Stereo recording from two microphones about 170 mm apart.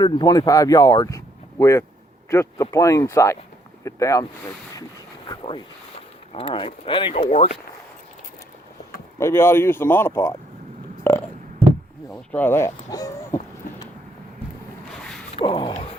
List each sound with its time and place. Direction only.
0.0 s speech: 25° left (ahead or behind)
4.7 s a sound: 25° left (ahead or behind)
6.3 s speech: 30° left (ahead or behind)
7.2 s speech: 45° left (ahead or behind)
9.1 s speech: 15° left (ahead or behind)
11.0 s burping: 10° left (ahead or behind)
12.1 s speech: 10° left (ahead or behind)
15.4 s speech: 30° left (ahead or behind)